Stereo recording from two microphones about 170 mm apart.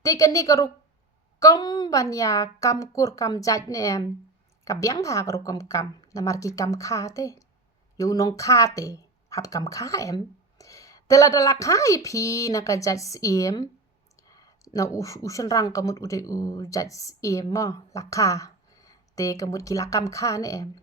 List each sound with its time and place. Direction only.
0.0 s speech: 20° left (ahead or behind)
14.2 s clicking: 20° left (ahead or behind)
14.9 s speech: 20° left (ahead or behind)